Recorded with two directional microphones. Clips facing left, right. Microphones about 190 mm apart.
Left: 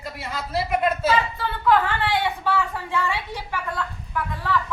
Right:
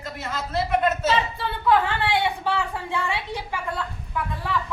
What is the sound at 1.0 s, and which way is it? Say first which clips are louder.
Speech: left 1 dB; 25° right (ahead or behind).